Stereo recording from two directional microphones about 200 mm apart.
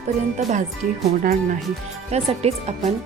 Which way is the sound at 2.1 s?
30° right (ahead or behind).